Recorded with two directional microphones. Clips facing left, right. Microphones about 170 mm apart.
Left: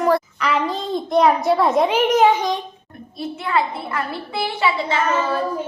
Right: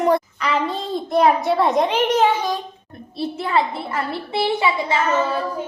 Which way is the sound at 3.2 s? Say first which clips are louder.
Right 1 dB; 30° right (ahead or behind).